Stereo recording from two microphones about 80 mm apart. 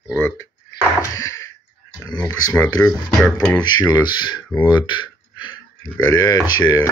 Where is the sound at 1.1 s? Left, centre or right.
Left.